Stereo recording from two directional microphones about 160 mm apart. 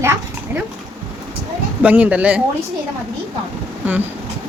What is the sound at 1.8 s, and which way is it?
Speech, 10° right (ahead or behind).